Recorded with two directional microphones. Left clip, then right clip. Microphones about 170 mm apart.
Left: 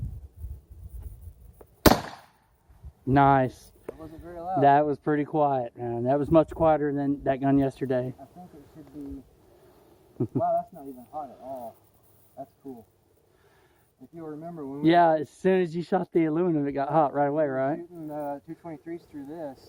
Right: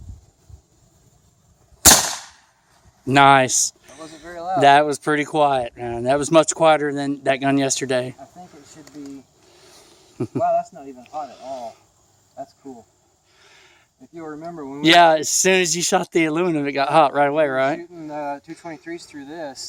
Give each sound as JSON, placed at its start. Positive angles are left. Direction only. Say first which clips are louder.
{"t": 3.1, "sound": "a man's voice", "louder": "right 8 dB", "side_deg": -15}
{"t": 4.2, "sound": "a sound", "louder": "right 7 dB", "side_deg": -20}
{"t": 4.6, "sound": "speech", "louder": "right 7 dB", "side_deg": -5}
{"t": 10.3, "sound": "a man's voice", "louder": "right 6 dB", "side_deg": -75}
{"t": 11.3, "sound": "speech", "louder": "right 6 dB", "side_deg": -20}
{"t": 14.2, "sound": "speech", "louder": "right 6 dB", "side_deg": -15}